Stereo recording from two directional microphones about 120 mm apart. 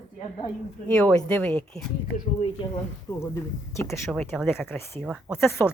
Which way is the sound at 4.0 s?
Centre (ahead or behind).